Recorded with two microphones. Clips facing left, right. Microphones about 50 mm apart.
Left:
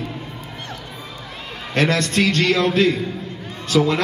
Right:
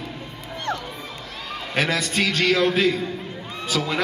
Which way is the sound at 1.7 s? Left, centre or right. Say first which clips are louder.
Left 4 dB; centre.